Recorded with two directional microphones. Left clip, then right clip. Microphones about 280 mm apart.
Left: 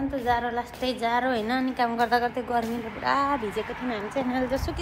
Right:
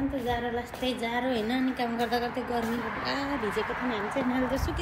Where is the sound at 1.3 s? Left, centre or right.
Left.